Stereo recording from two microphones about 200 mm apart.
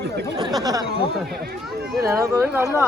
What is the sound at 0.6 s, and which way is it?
Speech, 20° right (ahead or behind).